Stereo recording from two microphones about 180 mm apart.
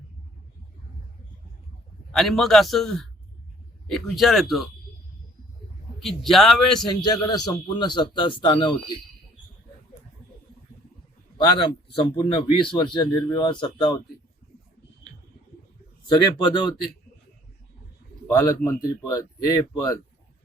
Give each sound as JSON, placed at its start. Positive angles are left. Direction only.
{"t": 2.1, "sound": "a man's voice", "side_deg": 0}
{"t": 6.0, "sound": "a man's voice", "side_deg": 0}
{"t": 7.0, "sound": "speech", "side_deg": 20}
{"t": 11.9, "sound": "speech", "side_deg": 30}
{"t": 16.0, "sound": "speech", "side_deg": 25}
{"t": 18.3, "sound": "speech", "side_deg": 20}